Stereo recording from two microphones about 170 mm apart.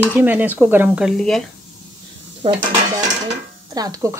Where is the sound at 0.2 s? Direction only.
10° right (ahead or behind).